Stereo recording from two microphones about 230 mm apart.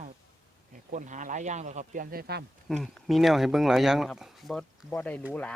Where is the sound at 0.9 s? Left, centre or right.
Right.